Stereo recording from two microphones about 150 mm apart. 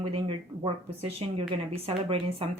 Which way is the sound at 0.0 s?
40° right (ahead or behind).